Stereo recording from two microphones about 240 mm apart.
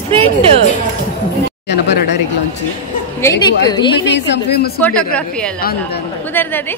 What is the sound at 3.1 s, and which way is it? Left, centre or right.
Speech, centre.